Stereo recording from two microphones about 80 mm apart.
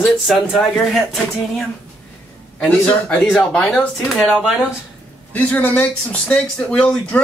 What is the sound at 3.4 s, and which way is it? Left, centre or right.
Speech, centre.